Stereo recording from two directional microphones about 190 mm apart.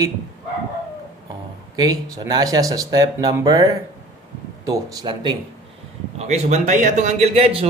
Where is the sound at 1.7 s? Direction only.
20° right (ahead or behind).